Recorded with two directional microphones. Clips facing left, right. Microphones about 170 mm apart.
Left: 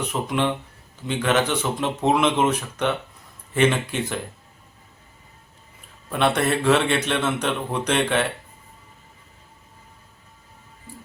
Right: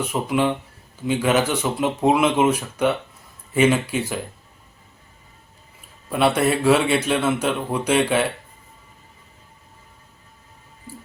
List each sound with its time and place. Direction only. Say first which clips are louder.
0.1 s a man's voice: right 3 dB; 10° right (ahead or behind)
6.1 s a man's voice: right 2 dB; 5° right (ahead or behind)